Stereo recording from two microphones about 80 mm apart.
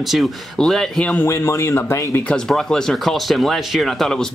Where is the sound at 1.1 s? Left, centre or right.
Left.